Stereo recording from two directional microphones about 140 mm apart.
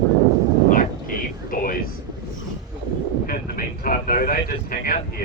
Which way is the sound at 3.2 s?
90° left.